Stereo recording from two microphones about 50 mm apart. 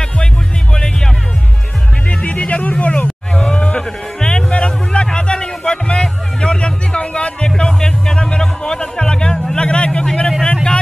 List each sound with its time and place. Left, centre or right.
2.0 s music: left
3.4 s a sound: centre
10.4 s vehicle: centre